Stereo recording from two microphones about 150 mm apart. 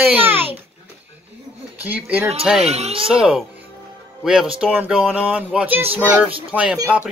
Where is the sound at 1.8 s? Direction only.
10° right (ahead or behind).